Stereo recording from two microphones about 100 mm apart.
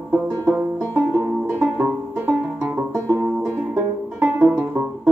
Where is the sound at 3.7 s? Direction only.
20° right (ahead or behind).